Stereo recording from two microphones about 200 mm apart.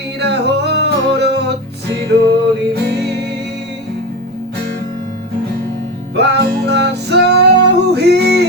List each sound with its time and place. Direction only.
0.2 s music: 55° right (ahead or behind)
6.1 s music: 55° right (ahead or behind)